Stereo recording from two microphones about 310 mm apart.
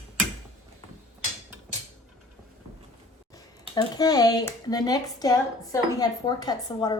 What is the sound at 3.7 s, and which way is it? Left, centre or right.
Speech, centre.